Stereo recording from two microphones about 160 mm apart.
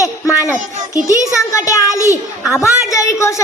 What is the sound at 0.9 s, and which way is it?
A woman's voice, 20° left (ahead or behind).